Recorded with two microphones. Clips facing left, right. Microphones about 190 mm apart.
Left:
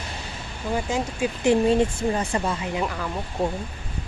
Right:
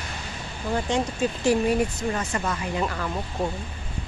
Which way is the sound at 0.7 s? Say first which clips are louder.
Right 1 dB; 5° left (ahead or behind).